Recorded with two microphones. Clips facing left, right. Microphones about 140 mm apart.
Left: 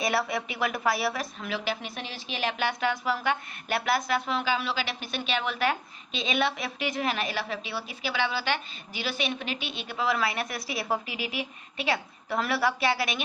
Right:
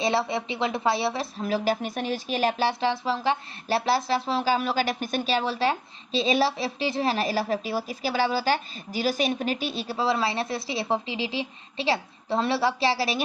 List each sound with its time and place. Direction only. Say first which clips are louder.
0.0 s a woman's voice: right 3 dB; 25° right (ahead or behind)